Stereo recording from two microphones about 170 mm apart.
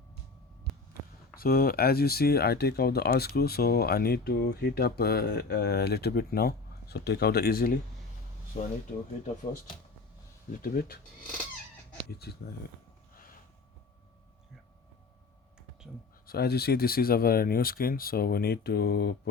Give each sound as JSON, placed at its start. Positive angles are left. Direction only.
{"t": 0.7, "sound": "heart sounds", "side_deg": 0}
{"t": 1.4, "sound": "speech", "side_deg": 60}
{"t": 10.6, "sound": "speech", "side_deg": 60}
{"t": 16.2, "sound": "speech", "side_deg": 65}